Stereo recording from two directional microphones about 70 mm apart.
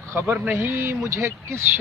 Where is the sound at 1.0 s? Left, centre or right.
Right.